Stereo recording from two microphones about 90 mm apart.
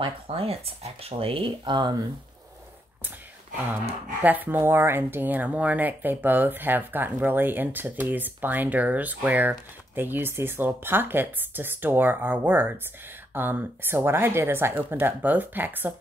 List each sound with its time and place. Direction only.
0.0 s speech: 90° right; by 2.0 s 55° right (ahead or behind)
4.2 s speech: 20° right (ahead or behind)